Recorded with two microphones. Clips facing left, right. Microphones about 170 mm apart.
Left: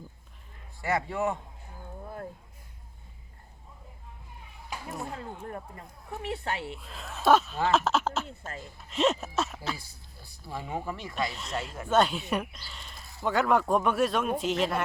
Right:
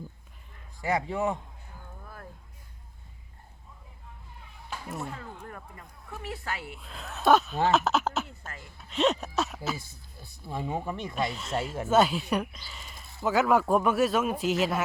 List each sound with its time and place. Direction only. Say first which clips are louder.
0.8 s a man's voice: right 1 dB; 15° right (ahead or behind)
2.0 s a sound: left 9 dB; 25° left (ahead or behind)
4.7 s a sound: even; 10° left (ahead or behind)
5.1 s a woman's voice: left 4 dB; 30° left (ahead or behind)
6.7 s speech: even; centre (ahead or behind)
8.3 s a woman's voice: left 4 dB; 25° left (ahead or behind)
8.8 s speech: even; centre (ahead or behind)
10.2 s speech: right 4 dB; 20° right (ahead or behind)
11.1 s speech: right 2 dB; centre (ahead or behind)